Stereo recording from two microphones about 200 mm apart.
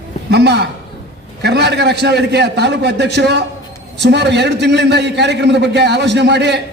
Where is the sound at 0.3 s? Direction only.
60° right (ahead or behind).